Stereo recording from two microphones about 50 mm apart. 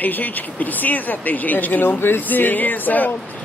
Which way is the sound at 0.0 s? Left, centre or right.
Left.